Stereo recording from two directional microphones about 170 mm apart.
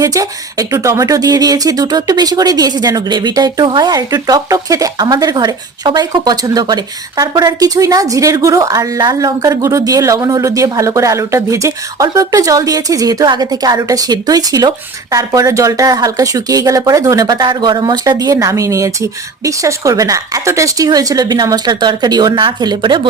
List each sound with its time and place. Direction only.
0.0 s speech: 20° right (ahead or behind)